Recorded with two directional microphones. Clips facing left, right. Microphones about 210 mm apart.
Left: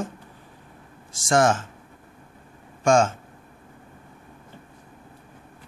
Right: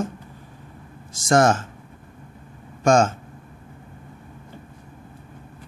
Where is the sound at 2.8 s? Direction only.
40° right (ahead or behind).